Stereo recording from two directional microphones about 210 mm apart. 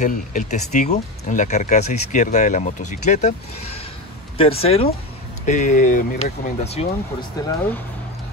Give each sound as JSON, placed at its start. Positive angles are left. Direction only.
{"t": 0.0, "sound": "speech", "side_deg": 35}